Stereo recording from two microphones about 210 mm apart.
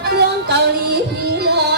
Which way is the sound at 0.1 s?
50° right (ahead or behind).